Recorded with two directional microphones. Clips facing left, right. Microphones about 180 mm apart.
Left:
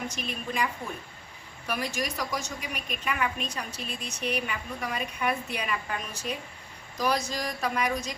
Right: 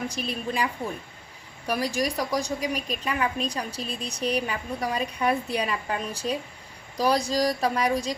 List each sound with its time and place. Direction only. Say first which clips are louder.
0.1 s a woman's voice: right 4 dB; 35° right (ahead or behind)